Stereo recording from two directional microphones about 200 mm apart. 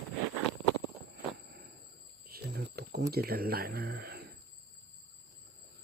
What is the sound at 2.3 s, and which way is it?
Cricket, 50° right (ahead or behind).